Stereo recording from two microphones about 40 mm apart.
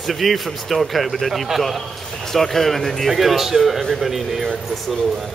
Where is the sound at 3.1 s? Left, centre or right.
Centre.